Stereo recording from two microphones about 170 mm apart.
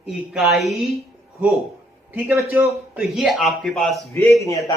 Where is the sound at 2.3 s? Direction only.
15° right (ahead or behind).